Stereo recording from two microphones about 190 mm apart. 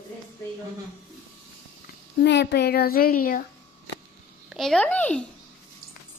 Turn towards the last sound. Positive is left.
turn(degrees=5)  # may be behind; listen again after turning